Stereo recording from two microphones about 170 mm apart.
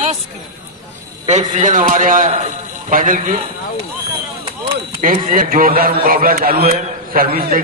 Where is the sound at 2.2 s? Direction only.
40° right (ahead or behind).